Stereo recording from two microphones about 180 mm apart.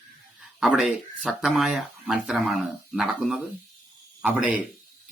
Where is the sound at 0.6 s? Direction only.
5° right (ahead or behind).